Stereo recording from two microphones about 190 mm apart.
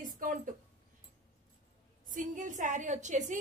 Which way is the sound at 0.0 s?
45° right (ahead or behind).